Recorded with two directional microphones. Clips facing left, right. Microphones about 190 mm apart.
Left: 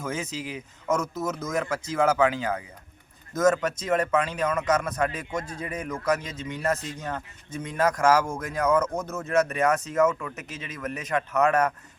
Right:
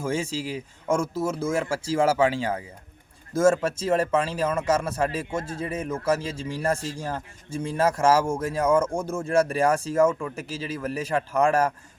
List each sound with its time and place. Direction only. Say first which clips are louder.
0.0 s a man's voice: right 4 dB; 30° right (ahead or behind)